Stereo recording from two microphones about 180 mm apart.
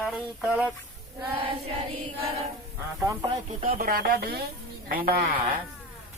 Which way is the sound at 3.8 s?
55° right (ahead or behind).